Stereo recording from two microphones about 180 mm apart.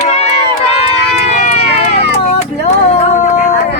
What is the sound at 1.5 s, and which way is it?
Run, 35° left (ahead or behind).